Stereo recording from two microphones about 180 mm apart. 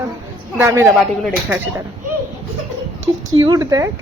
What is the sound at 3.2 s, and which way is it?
Speech, 20° right (ahead or behind).